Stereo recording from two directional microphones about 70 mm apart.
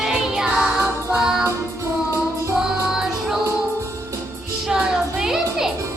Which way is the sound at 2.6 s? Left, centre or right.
Centre.